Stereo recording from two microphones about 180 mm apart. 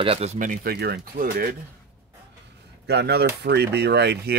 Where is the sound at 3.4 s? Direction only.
65° right (ahead or behind).